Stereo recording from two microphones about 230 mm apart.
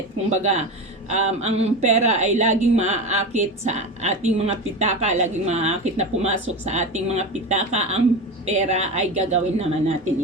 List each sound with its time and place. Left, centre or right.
0.3 s a woman's voice: right